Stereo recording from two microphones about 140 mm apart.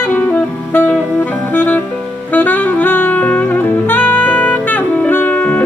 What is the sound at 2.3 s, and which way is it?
Saxophone, 15° left (ahead or behind).